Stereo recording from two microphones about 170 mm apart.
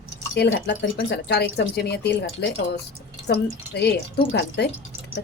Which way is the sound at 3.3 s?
75° left (ahead or behind).